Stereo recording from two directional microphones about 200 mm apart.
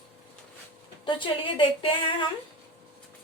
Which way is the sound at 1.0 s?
25° left (ahead or behind).